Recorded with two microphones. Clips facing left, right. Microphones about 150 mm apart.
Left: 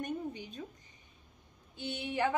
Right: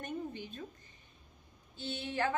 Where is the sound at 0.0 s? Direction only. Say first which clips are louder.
Left 2 dB; 15° left (ahead or behind).